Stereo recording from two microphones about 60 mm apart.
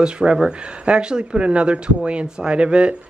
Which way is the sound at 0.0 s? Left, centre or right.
Centre.